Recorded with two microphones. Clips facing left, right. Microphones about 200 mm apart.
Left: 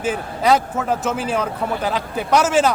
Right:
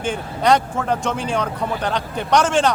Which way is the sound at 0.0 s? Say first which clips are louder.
Left 1 dB; 5° left (ahead or behind).